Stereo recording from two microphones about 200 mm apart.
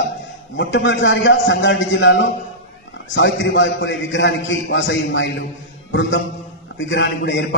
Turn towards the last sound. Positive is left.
turn(degrees=65)  # may be behind; listen again after turning